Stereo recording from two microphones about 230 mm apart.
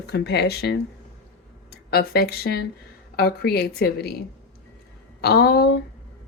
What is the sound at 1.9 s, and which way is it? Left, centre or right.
Speech, left.